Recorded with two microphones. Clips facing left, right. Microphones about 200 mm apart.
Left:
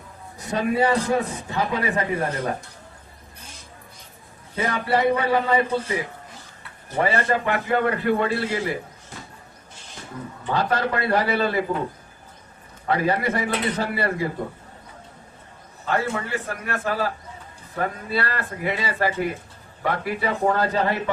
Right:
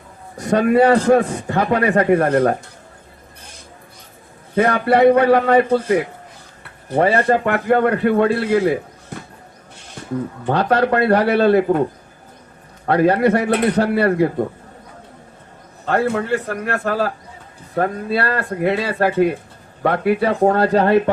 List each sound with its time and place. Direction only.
0.3 s a man's voice: 65° right (ahead or behind)
4.5 s a man's voice: 60° right (ahead or behind)
10.4 s a man's voice: 60° right (ahead or behind)
12.8 s a man's voice: 60° right (ahead or behind)
15.9 s a man's voice: 60° right (ahead or behind)